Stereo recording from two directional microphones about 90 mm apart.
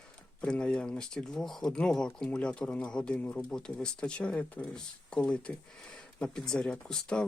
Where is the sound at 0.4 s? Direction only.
10° left (ahead or behind).